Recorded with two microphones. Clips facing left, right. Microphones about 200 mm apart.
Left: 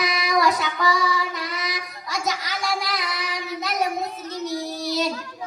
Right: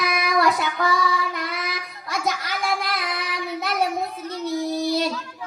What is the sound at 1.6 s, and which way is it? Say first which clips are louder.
Music: even; 55° right (ahead or behind).